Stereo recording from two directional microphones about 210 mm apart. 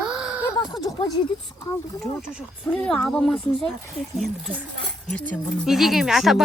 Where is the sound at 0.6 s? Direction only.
20° left (ahead or behind).